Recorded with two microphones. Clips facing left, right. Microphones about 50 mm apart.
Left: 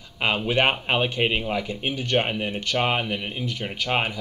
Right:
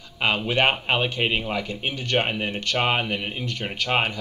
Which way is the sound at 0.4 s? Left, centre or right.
Centre.